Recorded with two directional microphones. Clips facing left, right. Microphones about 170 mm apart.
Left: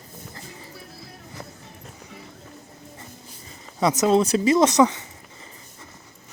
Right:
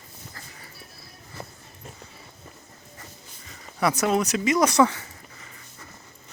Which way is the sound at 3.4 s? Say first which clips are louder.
Left 2 dB; 20° left (ahead or behind).